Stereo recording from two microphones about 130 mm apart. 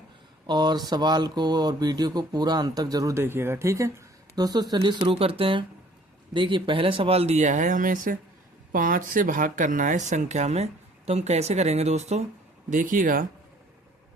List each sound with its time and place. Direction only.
0.4 s speech: 35° right (ahead or behind); by 12.2 s 60° right (ahead or behind)
12.7 s speech: 90° right